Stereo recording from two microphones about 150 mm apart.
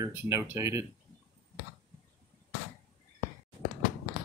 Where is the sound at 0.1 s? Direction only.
15° right (ahead or behind).